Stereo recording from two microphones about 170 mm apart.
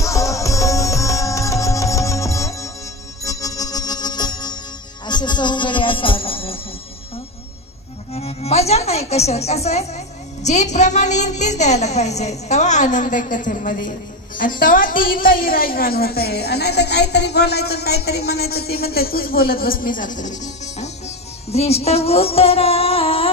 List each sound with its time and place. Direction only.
0.0 s music: 20° left (ahead or behind); by 6.6 s 35° left (ahead or behind)
8.1 s music: 40° left (ahead or behind)
10.4 s a woman's voice: 45° left (ahead or behind)
21.5 s music: 35° left (ahead or behind)